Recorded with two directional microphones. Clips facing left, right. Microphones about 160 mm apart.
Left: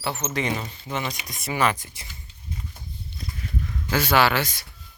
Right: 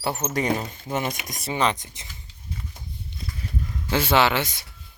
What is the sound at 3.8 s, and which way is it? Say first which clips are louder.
Speech: even; 25° right (ahead or behind).